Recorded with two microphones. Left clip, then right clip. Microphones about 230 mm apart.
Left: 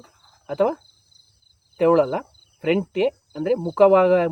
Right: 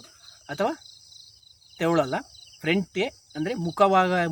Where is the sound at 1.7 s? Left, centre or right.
Right.